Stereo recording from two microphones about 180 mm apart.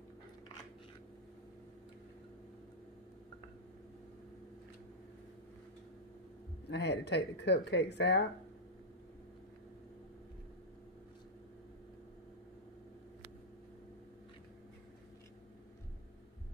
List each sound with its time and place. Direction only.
6.7 s speech: 70° left (ahead or behind)